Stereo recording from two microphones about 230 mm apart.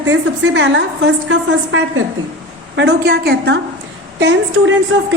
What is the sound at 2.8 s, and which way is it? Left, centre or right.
Speech, right.